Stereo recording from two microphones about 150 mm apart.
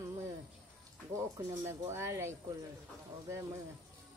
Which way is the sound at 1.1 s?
20° right (ahead or behind).